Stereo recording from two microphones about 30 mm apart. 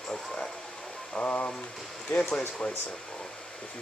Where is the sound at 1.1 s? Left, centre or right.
Left.